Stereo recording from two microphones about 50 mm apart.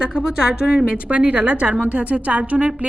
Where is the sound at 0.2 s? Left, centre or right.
Centre.